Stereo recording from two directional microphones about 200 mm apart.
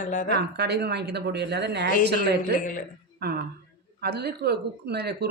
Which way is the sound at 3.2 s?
50° right (ahead or behind).